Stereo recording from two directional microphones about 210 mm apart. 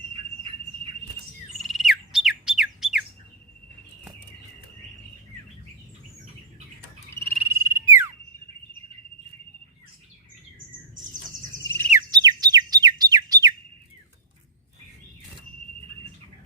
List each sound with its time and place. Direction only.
1.6 s bird: centre (ahead or behind)
7.4 s frog: 10° right (ahead or behind)
11.6 s a sound: 10° left (ahead or behind)
11.9 s bird: 15° right (ahead or behind)